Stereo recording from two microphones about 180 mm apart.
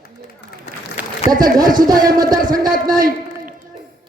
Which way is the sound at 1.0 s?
10° right (ahead or behind).